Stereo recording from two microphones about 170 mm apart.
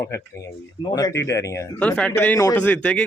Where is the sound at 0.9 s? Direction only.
20° left (ahead or behind); by 3.0 s 5° left (ahead or behind).